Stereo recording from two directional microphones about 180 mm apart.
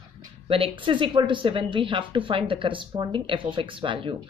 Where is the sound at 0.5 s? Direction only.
30° right (ahead or behind).